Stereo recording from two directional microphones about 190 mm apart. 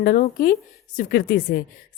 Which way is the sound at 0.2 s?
50° left (ahead or behind).